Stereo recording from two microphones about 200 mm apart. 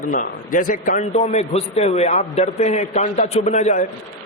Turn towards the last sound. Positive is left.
turn(degrees=40)  # may be behind; listen again after turning